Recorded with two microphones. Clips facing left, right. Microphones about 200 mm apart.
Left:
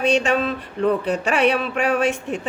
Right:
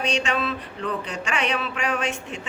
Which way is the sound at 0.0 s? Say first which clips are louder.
Left 6 dB; 55° left (ahead or behind).